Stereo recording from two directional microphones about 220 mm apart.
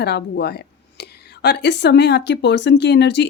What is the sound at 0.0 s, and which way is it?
Speech, 50° left (ahead or behind).